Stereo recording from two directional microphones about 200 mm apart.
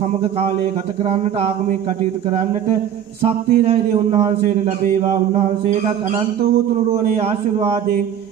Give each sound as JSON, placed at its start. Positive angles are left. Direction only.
{"t": 3.3, "sound": "speech", "side_deg": -30}